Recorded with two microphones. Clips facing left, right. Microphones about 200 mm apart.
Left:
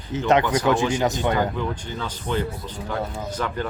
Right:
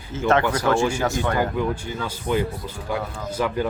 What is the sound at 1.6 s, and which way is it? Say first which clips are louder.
Speech: right 3 dB; 10° right (ahead or behind).